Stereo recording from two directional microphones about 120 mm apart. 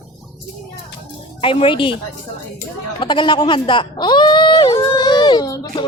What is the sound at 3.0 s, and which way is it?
Speech, 40° left (ahead or behind).